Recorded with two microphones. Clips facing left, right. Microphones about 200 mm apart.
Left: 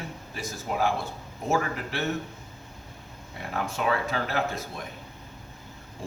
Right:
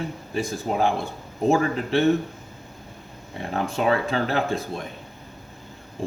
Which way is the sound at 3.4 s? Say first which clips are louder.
Right 5 dB; 30° right (ahead or behind).